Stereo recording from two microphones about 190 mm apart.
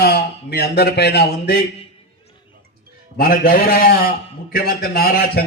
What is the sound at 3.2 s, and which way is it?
A man's voice, 50° left (ahead or behind).